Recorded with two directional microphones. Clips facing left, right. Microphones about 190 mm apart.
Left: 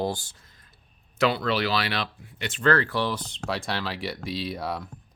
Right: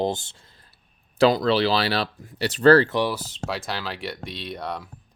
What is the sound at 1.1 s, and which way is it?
Speech, 35° right (ahead or behind).